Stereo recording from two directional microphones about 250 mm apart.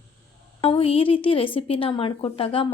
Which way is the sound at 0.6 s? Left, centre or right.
Left.